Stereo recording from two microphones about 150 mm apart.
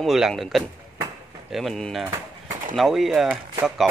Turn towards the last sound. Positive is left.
turn(degrees=0)  # may be behind; listen again after turning